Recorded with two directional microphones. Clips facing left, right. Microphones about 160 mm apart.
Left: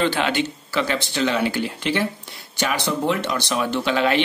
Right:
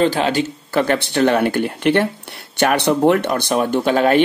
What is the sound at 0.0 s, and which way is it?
Speech, 35° right (ahead or behind).